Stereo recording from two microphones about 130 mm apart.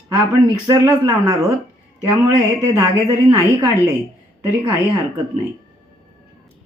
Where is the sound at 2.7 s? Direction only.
25° right (ahead or behind).